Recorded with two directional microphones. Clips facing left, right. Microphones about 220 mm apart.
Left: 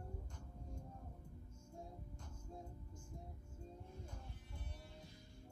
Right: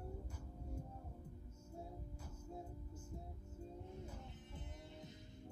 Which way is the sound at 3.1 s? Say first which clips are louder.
Right 3 dB; 5° right (ahead or behind).